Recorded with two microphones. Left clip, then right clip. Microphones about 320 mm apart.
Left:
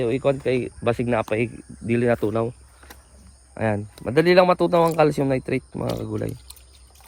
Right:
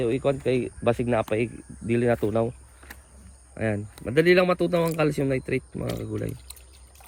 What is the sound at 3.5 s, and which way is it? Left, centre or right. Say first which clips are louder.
Speech: left 4 dB; centre.